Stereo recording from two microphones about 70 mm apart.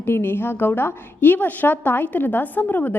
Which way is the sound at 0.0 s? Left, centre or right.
Left.